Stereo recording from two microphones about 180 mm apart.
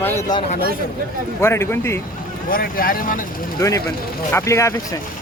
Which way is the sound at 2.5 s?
55° left (ahead or behind).